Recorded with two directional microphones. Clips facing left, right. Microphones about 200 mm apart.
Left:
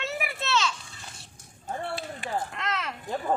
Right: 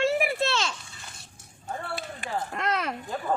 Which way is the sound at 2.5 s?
40° right (ahead or behind).